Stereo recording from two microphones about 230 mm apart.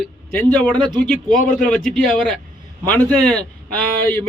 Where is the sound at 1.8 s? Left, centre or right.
Centre.